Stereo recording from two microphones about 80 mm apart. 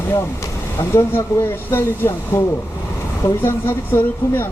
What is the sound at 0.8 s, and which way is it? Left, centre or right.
Speech, left.